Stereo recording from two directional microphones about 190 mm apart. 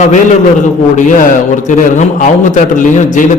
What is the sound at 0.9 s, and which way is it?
A man's voice, 40° left (ahead or behind).